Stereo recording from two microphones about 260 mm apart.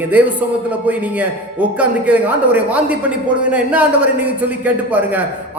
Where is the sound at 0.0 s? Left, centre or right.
Centre.